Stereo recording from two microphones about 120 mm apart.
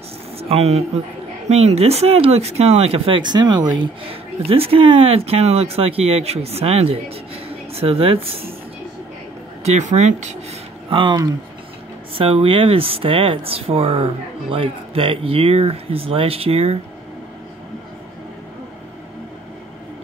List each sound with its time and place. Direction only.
0.4 s speech: 60° right (ahead or behind)
3.2 s speech: 35° right (ahead or behind)
3.8 s speech: 50° right (ahead or behind)
9.7 s speech: 80° right
10.9 s speech: 45° right (ahead or behind)
12.2 s speech: 50° right (ahead or behind)